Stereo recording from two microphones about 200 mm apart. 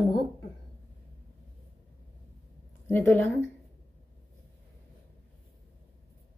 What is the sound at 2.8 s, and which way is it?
Speech, 10° left (ahead or behind).